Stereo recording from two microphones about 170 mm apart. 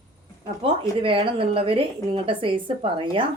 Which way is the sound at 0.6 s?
30° right (ahead or behind).